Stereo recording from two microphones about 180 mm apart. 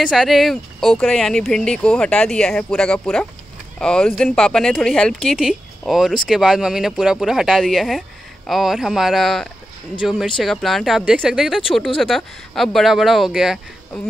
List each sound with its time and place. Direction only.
0.0 s speech: centre (ahead or behind)